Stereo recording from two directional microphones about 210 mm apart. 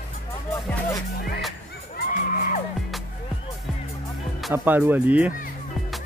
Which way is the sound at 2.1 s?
40° left (ahead or behind).